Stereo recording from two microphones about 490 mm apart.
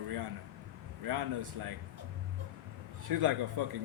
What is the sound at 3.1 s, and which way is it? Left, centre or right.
Speech, right.